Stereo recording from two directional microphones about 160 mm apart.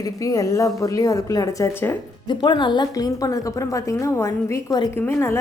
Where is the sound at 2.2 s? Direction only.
30° left (ahead or behind).